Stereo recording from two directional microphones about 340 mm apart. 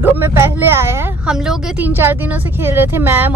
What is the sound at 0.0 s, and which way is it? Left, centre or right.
Speech, centre.